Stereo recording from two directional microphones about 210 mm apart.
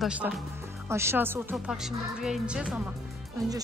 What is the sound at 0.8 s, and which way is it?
Speech, 10° right (ahead or behind).